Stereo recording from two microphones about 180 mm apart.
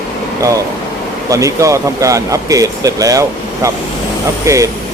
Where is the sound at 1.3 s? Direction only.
20° right (ahead or behind).